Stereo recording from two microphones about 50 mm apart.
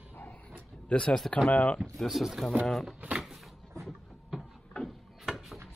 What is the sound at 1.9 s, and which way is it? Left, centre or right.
Speech, centre.